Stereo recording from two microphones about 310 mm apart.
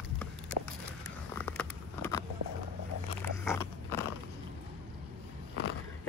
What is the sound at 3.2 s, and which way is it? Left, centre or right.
Biting, centre.